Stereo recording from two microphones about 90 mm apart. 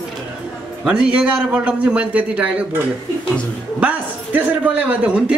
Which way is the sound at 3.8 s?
20° right (ahead or behind).